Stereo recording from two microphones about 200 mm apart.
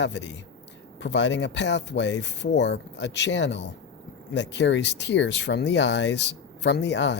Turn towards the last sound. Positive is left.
turn(degrees=60)  # may be behind; listen again after turning